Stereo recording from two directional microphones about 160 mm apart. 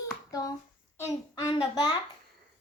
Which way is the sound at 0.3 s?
25° left (ahead or behind).